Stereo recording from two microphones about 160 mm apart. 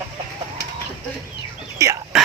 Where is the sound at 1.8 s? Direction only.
20° right (ahead or behind).